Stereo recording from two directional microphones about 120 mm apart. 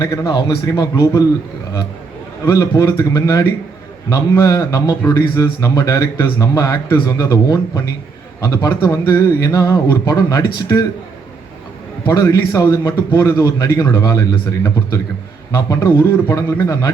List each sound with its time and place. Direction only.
0.0 s a man's voice: 25° left (ahead or behind)
2.5 s a man's voice: 25° left (ahead or behind)
12.1 s a man's voice: 30° left (ahead or behind)